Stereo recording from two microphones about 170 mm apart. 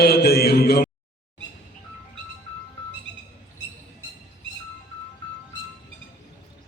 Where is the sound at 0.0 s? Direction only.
65° left (ahead or behind).